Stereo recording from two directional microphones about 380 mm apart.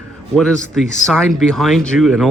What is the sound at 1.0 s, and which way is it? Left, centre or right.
Speech, centre.